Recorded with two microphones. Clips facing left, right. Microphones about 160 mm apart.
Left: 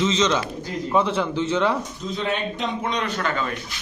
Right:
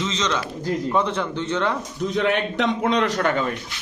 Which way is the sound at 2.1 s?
70° right (ahead or behind).